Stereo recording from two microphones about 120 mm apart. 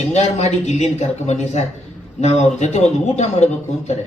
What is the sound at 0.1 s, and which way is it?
A man's voice, 70° left (ahead or behind).